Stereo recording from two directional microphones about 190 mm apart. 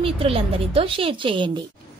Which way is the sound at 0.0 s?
30° right (ahead or behind).